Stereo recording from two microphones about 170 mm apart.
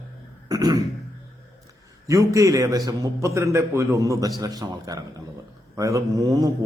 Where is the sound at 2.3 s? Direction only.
20° right (ahead or behind).